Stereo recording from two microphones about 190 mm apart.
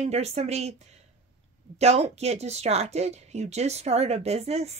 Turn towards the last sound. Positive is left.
turn(degrees=-35)  # may be behind; listen again after turning